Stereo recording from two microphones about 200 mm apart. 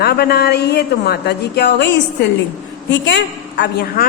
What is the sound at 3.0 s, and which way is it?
A woman's voice, 60° left (ahead or behind).